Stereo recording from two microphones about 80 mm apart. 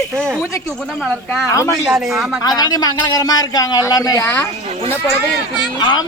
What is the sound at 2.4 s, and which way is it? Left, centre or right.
A woman's voice, left.